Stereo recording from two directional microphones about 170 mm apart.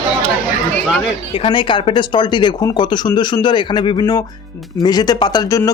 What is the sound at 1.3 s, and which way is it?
Speech, 35° left (ahead or behind).